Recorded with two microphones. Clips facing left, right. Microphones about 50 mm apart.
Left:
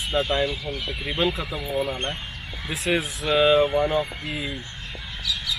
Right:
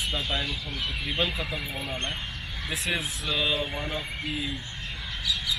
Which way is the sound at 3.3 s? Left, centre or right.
Left.